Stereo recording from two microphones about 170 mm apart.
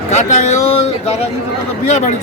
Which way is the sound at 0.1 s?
45° left (ahead or behind).